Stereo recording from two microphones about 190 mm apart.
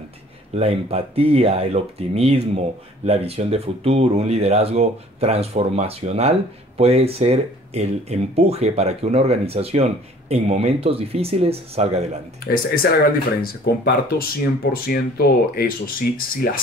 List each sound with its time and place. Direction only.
0.6 s speech: 30° right (ahead or behind)
13.4 s speech: 50° left (ahead or behind)